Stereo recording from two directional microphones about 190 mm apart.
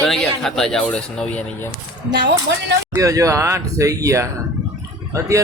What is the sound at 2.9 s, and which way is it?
Speech, 15° right (ahead or behind).